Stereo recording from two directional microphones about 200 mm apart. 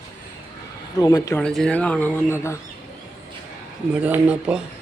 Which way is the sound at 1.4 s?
5° left (ahead or behind).